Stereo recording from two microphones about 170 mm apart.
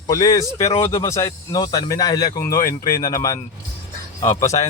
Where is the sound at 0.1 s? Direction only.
20° left (ahead or behind).